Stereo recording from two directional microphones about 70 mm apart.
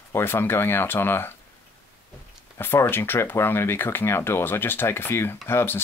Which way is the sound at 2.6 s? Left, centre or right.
Left.